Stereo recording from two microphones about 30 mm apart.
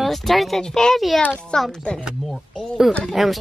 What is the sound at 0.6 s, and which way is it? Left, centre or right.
A child's voice, left.